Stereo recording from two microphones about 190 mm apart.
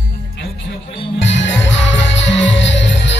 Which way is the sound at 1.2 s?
70° left (ahead or behind).